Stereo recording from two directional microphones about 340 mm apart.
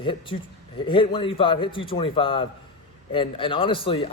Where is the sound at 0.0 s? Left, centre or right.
Centre.